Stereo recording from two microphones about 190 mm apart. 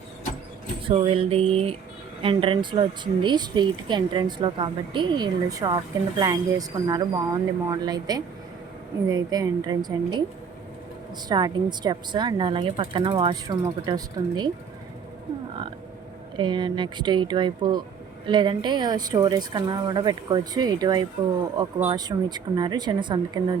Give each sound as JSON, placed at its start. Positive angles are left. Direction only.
{"t": 0.9, "sound": "a sound", "side_deg": -30}
{"t": 2.2, "sound": "speech", "side_deg": -30}
{"t": 11.3, "sound": "speech", "side_deg": -20}
{"t": 16.4, "sound": "speech", "side_deg": -25}